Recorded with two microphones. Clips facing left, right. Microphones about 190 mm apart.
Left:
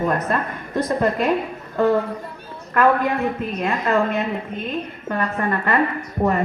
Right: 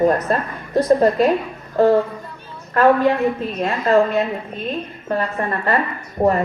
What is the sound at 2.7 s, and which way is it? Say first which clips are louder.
A woman's voice: right 3 dB; 30° right (ahead or behind).